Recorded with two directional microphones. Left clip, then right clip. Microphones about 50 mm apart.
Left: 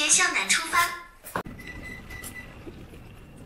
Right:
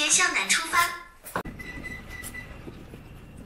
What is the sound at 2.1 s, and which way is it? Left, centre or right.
Train, centre.